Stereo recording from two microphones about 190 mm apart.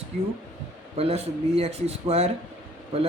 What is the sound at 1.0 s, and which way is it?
Speech, 30° right (ahead or behind).